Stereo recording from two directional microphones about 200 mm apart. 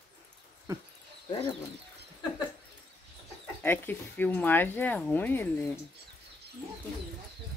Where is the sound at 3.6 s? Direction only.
10° left (ahead or behind).